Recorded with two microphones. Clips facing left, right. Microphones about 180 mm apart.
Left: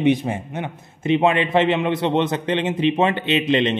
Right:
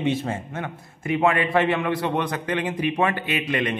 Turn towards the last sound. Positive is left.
turn(degrees=25)  # may be behind; listen again after turning